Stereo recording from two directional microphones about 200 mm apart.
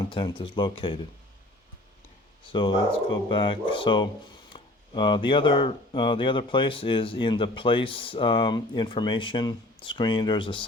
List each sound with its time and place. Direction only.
0.0 s speech: 20° left (ahead or behind)
2.5 s speech: 25° left (ahead or behind)